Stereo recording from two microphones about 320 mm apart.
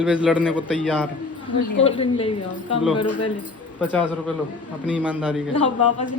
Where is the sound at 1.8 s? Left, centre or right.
Centre.